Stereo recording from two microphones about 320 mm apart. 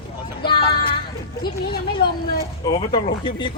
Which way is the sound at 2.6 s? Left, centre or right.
Centre.